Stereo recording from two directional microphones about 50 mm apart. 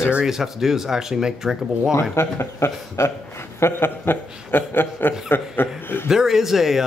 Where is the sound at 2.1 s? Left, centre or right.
Left.